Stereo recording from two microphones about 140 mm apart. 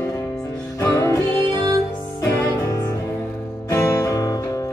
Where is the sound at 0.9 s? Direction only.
20° left (ahead or behind).